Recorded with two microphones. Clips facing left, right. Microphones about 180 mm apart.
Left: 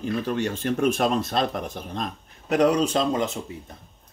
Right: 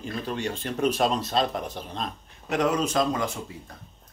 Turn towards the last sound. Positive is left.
turn(degrees=25)  # may be behind; listen again after turning